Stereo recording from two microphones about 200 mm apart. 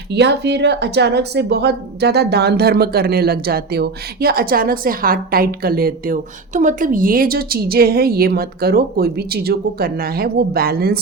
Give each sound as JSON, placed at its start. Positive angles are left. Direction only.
{"t": 0.1, "sound": "speech", "side_deg": -55}